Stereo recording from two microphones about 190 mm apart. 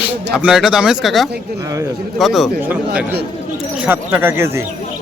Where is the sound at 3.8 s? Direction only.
10° right (ahead or behind).